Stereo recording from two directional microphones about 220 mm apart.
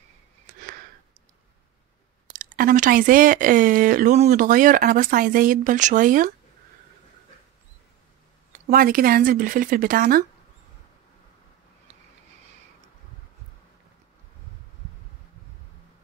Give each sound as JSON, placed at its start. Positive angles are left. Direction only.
{"t": 2.3, "sound": "speech", "side_deg": -40}
{"t": 8.6, "sound": "speech", "side_deg": -40}